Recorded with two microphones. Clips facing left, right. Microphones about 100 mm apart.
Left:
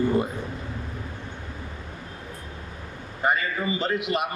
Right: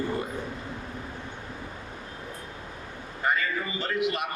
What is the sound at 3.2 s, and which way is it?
A man's voice, 20° left (ahead or behind).